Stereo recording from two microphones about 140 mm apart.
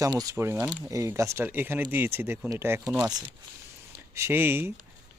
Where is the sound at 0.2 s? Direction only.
20° right (ahead or behind).